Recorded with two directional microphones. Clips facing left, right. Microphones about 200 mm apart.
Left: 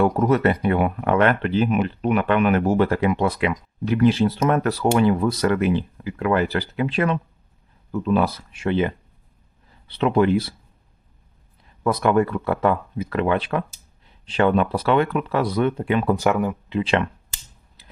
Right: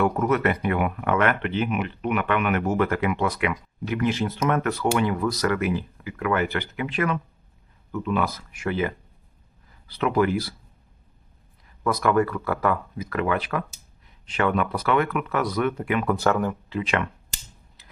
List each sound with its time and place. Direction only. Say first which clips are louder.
0.0 s speech: left 4 dB; 35° left (ahead or behind)
11.8 s speech: left 3 dB; 25° left (ahead or behind)
16.1 s speech: left 2 dB; 10° left (ahead or behind)
16.8 s speech: left 5 dB; 30° left (ahead or behind)